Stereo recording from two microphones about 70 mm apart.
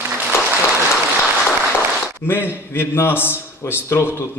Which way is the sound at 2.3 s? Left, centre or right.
Left.